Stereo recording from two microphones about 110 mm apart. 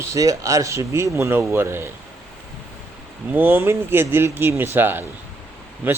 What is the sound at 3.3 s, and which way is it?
Speech, 20° right (ahead or behind).